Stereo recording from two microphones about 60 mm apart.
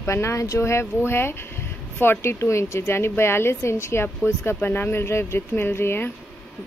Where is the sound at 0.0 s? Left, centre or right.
Left.